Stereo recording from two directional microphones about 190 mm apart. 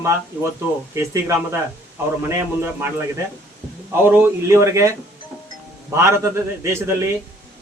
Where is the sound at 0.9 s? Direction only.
15° right (ahead or behind).